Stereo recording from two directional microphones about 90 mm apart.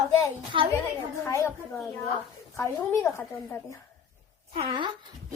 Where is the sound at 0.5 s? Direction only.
70° right (ahead or behind).